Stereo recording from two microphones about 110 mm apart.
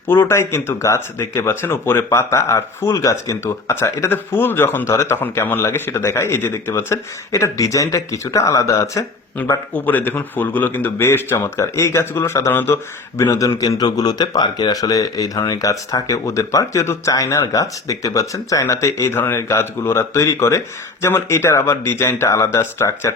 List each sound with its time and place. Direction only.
0.1 s speech: 20° left (ahead or behind)
9.5 s speech: 15° left (ahead or behind)